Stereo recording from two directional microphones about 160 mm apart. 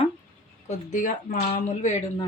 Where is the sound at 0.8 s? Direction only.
50° left (ahead or behind).